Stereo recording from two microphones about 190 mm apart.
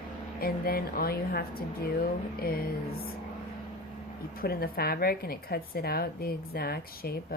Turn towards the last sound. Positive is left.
turn(degrees=55)  # may be behind; listen again after turning